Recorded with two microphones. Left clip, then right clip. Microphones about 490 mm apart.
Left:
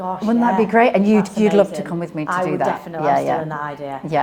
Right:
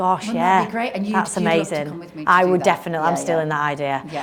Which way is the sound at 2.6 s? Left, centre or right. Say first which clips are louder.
Right 1 dB; right.